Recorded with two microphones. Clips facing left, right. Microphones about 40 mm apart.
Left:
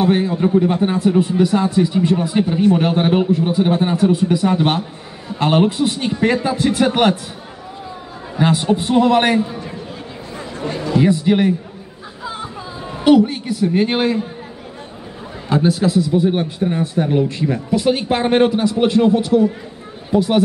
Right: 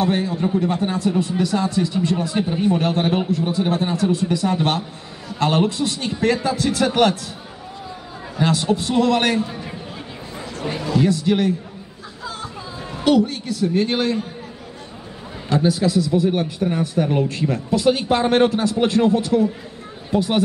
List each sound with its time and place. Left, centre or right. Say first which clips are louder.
0.0 s a man's voice: left 4 dB; left
8.4 s a man's voice: left 3 dB; left
9.5 s a man's voice: left 3 dB; centre
10.6 s a sound: left 2 dB; centre
10.9 s a man's voice: left 4 dB; left
12.9 s a man's voice: left 5 dB; centre
15.8 s a man's voice: left 3 dB; centre
17.0 s speech: left 1 dB; centre
17.3 s a man's voice: left 2 dB; centre
20.1 s speech: left 4 dB; centre